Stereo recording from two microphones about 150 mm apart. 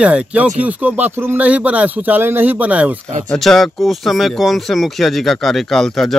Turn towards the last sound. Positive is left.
turn(degrees=0)  # may be behind; listen again after turning